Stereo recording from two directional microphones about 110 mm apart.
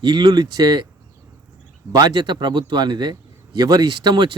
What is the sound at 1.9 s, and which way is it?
Speech, 40° right (ahead or behind).